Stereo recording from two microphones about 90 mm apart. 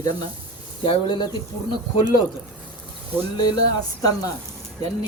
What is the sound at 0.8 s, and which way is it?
Speech, 75° left (ahead or behind).